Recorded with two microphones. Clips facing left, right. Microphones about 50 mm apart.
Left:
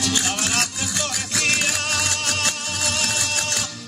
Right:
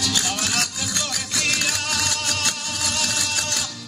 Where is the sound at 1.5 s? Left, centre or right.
Left.